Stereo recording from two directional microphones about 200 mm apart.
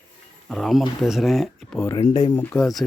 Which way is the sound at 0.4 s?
Centre (ahead or behind).